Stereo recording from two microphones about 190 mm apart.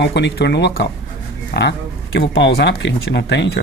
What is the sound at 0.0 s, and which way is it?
Speech, 65° left (ahead or behind).